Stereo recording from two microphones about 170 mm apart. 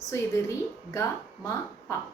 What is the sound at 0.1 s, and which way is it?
Female singing, 15° left (ahead or behind).